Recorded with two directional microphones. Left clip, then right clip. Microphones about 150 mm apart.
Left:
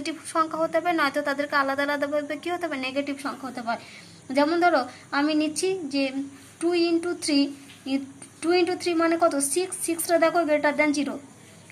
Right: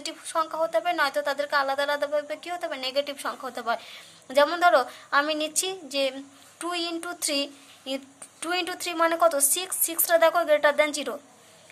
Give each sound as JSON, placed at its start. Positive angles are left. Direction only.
{"t": 0.0, "sound": "speech", "side_deg": -30}